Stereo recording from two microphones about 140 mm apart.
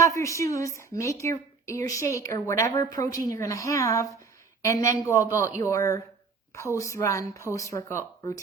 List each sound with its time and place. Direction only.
0.0 s a woman's voice: 20° left (ahead or behind)